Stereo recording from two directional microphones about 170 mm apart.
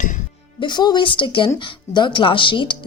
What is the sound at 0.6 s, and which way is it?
A woman's voice, 25° left (ahead or behind).